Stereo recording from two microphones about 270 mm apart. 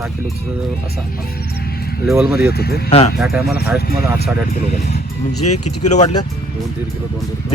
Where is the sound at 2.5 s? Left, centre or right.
Left.